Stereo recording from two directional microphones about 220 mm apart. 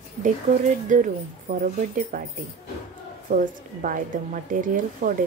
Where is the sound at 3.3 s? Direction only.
35° right (ahead or behind).